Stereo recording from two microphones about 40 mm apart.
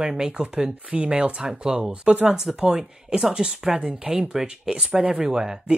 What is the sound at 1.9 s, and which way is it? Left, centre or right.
Speech, right.